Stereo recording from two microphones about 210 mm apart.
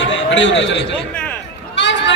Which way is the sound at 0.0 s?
60° left (ahead or behind).